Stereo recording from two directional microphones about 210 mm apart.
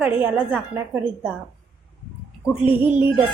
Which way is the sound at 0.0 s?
5° right (ahead or behind).